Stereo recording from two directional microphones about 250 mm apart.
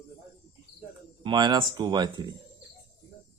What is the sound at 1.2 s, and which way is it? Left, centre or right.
Speech, centre.